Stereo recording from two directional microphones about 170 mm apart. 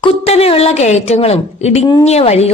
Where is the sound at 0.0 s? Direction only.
35° left (ahead or behind).